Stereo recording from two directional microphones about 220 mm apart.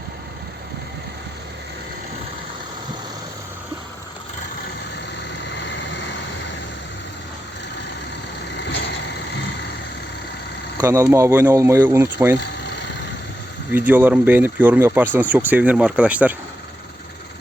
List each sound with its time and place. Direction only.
5.5 s vehicle: 55° left (ahead or behind)
10.8 s speech: 15° right (ahead or behind)
13.7 s speech: 10° right (ahead or behind)